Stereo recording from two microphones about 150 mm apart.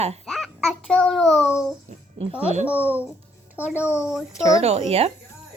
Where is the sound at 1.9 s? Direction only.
45° right (ahead or behind).